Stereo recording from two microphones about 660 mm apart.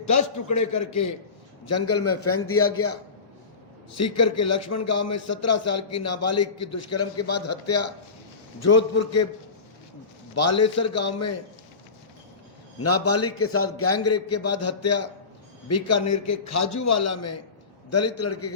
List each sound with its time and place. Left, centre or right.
0.3 s a man's voice: left
10.3 s a man's voice: left
12.8 s a man's voice: left